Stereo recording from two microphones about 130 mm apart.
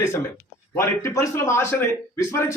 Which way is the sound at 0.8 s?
25° left (ahead or behind).